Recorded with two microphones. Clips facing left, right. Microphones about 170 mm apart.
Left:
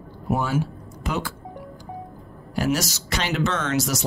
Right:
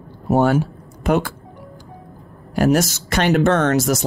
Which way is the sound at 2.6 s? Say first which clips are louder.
Right 7 dB; 55° right (ahead or behind).